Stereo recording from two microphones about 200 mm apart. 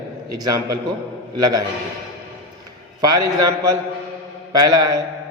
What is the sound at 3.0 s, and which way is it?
A man's voice, 20° right (ahead or behind).